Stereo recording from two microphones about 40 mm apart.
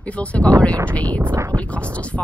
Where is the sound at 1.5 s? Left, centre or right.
Left.